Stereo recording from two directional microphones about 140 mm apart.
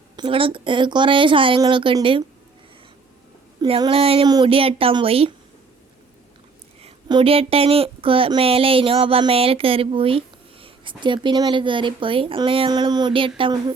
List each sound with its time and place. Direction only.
0.2 s speech: 40° right (ahead or behind)
3.7 s a sound: 40° right (ahead or behind)
4.4 s speech: 40° right (ahead or behind)
7.1 s speech: 35° right (ahead or behind)